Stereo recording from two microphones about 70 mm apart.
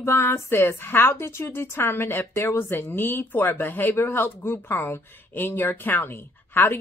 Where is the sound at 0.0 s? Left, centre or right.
Left.